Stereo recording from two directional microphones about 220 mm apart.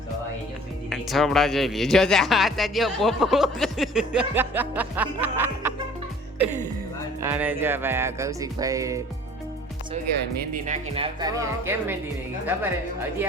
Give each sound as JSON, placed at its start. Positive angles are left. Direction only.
{"t": 0.9, "sound": "speech", "side_deg": 0}
{"t": 7.2, "sound": "music", "side_deg": -10}
{"t": 10.2, "sound": "speech", "side_deg": -40}
{"t": 10.9, "sound": "music", "side_deg": -20}